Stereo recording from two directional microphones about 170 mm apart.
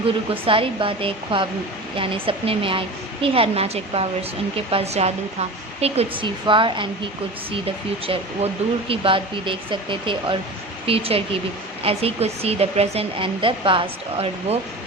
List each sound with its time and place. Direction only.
0.3 s speech: 30° right (ahead or behind)
8.0 s speech: 35° right (ahead or behind)